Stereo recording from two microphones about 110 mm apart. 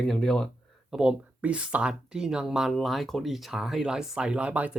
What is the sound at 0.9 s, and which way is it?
Speech, 10° right (ahead or behind).